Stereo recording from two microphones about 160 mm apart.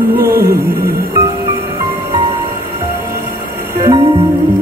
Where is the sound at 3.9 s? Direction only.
25° right (ahead or behind).